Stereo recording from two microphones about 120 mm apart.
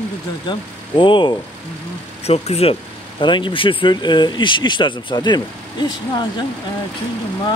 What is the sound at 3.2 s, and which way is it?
Speech, 40° left (ahead or behind).